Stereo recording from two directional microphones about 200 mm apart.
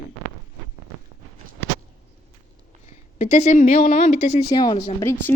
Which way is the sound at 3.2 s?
35° left (ahead or behind).